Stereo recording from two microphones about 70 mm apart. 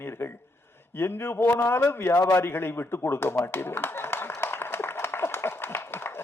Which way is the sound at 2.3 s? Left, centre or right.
Left.